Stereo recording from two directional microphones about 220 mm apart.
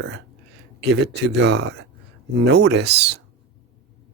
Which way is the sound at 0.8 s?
50° right (ahead or behind).